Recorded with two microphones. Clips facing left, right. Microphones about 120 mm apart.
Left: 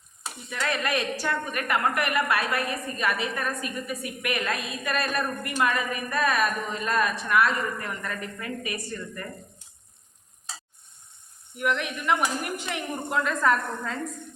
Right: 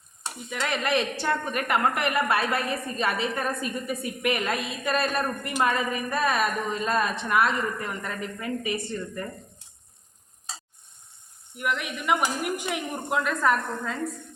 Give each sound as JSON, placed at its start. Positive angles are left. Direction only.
{"t": 0.5, "sound": "speech", "side_deg": -20}
{"t": 11.5, "sound": "speech", "side_deg": -5}